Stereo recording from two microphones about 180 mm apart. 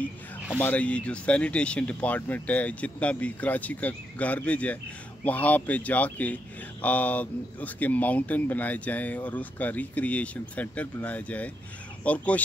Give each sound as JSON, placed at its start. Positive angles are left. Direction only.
{"t": 0.6, "sound": "speech", "side_deg": 10}